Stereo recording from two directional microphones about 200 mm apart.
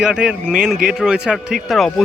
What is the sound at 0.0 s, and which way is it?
Speech, 5° right (ahead or behind).